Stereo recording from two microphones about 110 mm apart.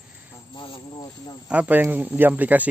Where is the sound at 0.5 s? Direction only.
50° left (ahead or behind).